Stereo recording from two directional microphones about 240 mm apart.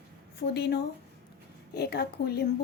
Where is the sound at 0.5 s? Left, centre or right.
Left.